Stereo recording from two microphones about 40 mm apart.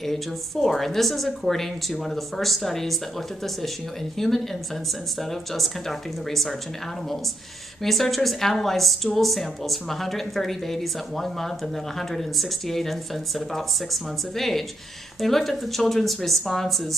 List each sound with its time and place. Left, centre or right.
0.0 s a woman's voice: centre
5.3 s speech: centre
7.8 s a woman's voice: centre